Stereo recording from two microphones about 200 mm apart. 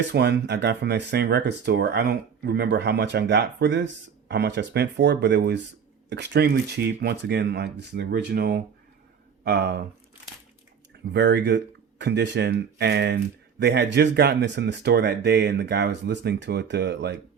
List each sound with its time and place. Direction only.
0.1 s speech: 55° right (ahead or behind)
11.1 s speech: 55° right (ahead or behind)